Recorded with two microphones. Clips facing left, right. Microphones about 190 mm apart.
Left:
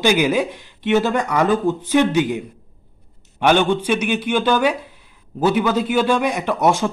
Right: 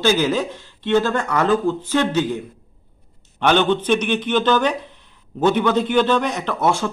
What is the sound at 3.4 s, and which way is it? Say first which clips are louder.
A man's voice: left 1 dB; 10° left (ahead or behind).